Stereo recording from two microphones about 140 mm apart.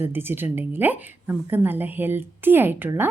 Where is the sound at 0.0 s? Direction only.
15° right (ahead or behind).